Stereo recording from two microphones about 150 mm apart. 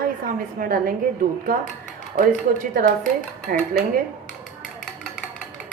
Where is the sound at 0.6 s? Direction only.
70° right (ahead or behind).